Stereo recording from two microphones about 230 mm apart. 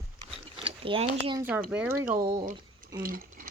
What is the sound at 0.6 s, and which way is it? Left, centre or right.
Speech, right.